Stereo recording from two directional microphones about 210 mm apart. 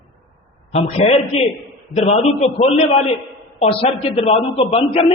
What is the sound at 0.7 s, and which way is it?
A man's voice, 30° left (ahead or behind).